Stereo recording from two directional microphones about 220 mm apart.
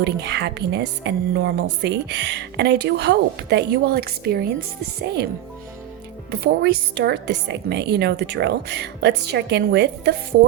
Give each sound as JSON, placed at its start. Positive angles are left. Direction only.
{"t": 0.0, "sound": "a woman's voice", "side_deg": -50}
{"t": 6.4, "sound": "a woman's voice", "side_deg": -45}